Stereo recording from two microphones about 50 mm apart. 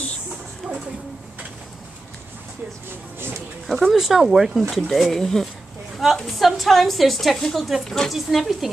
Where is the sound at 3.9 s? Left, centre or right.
Centre.